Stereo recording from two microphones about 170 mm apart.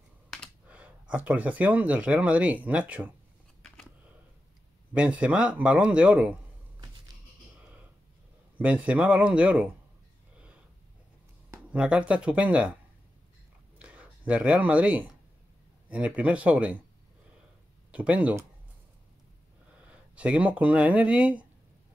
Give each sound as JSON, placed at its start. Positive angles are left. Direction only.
{"t": 0.7, "sound": "speech", "side_deg": -10}
{"t": 4.9, "sound": "speech", "side_deg": -10}
{"t": 8.5, "sound": "speech", "side_deg": -10}
{"t": 11.7, "sound": "speech", "side_deg": -5}
{"t": 13.7, "sound": "a sound", "side_deg": -10}
{"t": 15.9, "sound": "speech", "side_deg": -10}
{"t": 17.9, "sound": "speech", "side_deg": -10}
{"t": 19.9, "sound": "speech", "side_deg": -10}